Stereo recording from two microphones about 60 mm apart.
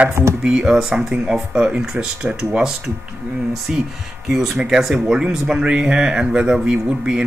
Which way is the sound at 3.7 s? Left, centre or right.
Centre.